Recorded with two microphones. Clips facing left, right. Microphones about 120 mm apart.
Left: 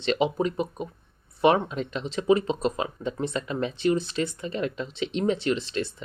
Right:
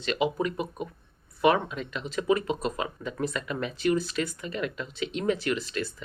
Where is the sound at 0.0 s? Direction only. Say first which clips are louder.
Left 3 dB; 30° left (ahead or behind).